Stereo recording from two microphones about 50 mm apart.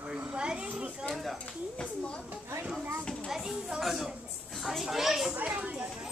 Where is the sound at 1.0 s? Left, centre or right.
Centre.